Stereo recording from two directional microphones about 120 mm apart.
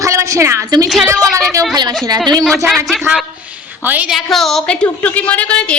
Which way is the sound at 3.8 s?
15° right (ahead or behind).